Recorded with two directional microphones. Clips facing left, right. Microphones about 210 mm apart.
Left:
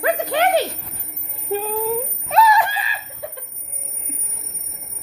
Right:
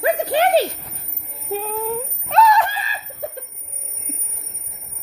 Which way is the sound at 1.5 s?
Centre (ahead or behind).